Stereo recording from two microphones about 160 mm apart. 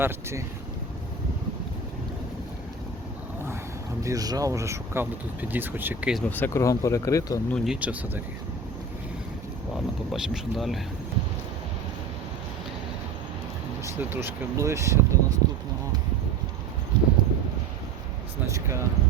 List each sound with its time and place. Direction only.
0.0 s speech: 15° right (ahead or behind)
4.0 s speech: 20° right (ahead or behind)
6.2 s speech: 10° left (ahead or behind)
7.5 s speech: centre (ahead or behind)
9.7 s speech: centre (ahead or behind)
14.0 s speech: 15° right (ahead or behind)
16.9 s clip-clop: 30° right (ahead or behind)
18.4 s a sound: 20° right (ahead or behind)